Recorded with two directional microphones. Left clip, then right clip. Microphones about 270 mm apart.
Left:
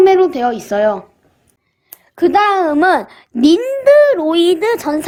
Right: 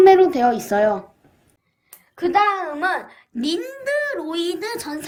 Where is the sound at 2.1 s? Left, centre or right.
Left.